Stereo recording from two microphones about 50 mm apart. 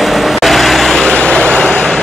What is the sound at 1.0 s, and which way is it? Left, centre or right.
Vehicle, left.